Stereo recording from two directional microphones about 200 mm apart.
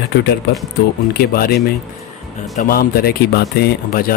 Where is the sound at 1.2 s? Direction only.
50° left (ahead or behind).